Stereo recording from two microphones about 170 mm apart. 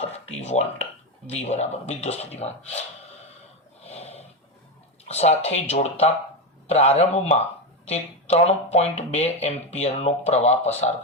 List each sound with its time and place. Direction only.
0.3 s a sound: 40° left (ahead or behind)
1.4 s speech: 40° left (ahead or behind)
3.8 s snoring: 40° left (ahead or behind)
5.0 s speech: 40° left (ahead or behind)